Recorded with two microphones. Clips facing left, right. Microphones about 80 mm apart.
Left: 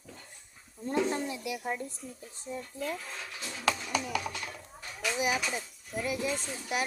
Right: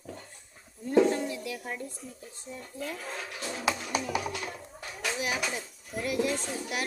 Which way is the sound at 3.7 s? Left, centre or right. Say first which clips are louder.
Even; centre.